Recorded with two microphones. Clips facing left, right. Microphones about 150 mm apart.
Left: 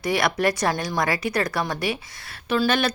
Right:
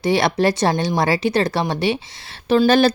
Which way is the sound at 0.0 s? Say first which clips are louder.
Right 5 dB; 30° right (ahead or behind).